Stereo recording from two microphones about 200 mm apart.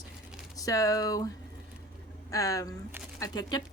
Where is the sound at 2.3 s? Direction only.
15° left (ahead or behind).